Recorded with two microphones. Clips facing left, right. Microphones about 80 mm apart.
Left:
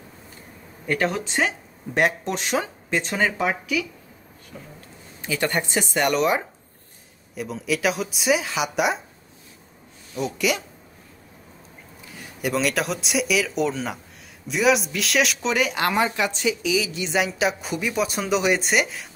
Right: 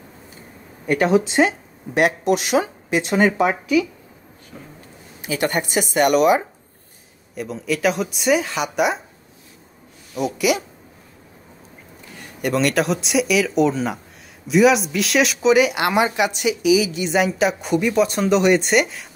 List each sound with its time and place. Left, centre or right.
0.8 s speech: centre
3.4 s speech: right
5.4 s speech: centre
10.2 s speech: centre
12.1 s speech: centre